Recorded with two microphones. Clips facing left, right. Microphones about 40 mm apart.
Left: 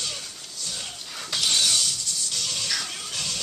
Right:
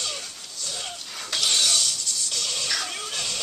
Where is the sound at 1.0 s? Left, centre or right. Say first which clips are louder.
Even; centre.